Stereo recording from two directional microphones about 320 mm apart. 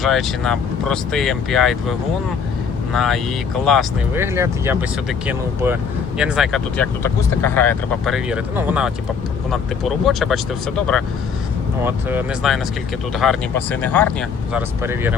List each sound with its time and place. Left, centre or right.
0.0 s speech: centre
10.1 s speech: centre
14.8 s speech: centre